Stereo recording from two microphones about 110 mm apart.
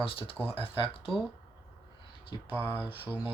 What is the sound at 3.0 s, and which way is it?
Speech, 15° right (ahead or behind).